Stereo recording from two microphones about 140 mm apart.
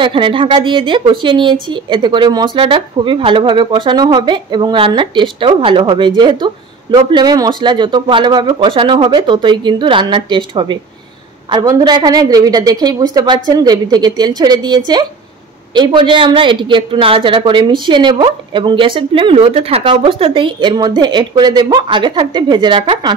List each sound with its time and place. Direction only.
0.0 s a woman's voice: 35° right (ahead or behind)